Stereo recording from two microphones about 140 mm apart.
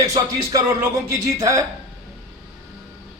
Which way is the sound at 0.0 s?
25° right (ahead or behind).